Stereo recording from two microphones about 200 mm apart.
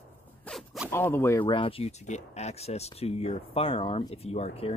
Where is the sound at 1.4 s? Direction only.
25° left (ahead or behind).